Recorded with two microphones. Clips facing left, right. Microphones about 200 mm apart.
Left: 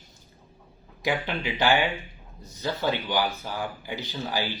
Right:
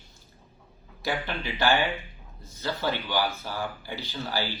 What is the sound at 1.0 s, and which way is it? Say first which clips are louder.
Speech: left 3 dB; 15° left (ahead or behind).